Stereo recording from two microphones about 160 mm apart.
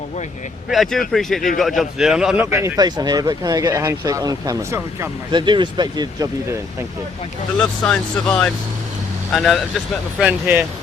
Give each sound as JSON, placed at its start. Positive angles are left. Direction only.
{"t": 0.7, "sound": "speech", "side_deg": 0}
{"t": 7.6, "sound": "speech", "side_deg": 5}